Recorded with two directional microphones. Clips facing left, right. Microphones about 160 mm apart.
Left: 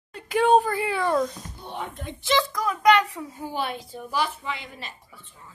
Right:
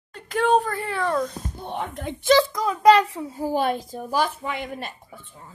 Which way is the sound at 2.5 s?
25° right (ahead or behind).